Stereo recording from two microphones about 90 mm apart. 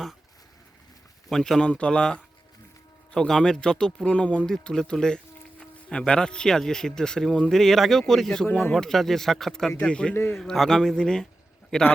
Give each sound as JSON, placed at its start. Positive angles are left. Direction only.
{"t": 1.3, "sound": "speech", "side_deg": 5}
{"t": 8.4, "sound": "speech", "side_deg": 25}
{"t": 8.7, "sound": "speech", "side_deg": 5}